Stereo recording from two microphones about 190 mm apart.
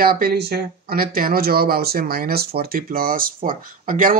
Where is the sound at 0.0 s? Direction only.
50° right (ahead or behind).